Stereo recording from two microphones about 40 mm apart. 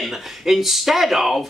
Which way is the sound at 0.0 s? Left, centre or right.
Centre.